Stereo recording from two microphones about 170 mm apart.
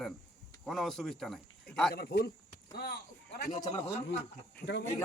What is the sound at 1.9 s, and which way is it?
Speech, 70° left (ahead or behind).